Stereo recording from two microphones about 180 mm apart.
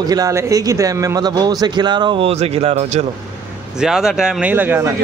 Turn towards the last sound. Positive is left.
turn(degrees=-10)  # may be behind; listen again after turning